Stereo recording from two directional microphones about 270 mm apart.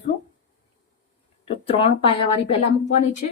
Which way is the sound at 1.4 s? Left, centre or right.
Centre.